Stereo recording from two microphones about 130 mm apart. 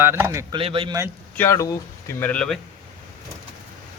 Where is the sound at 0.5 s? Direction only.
45° right (ahead or behind).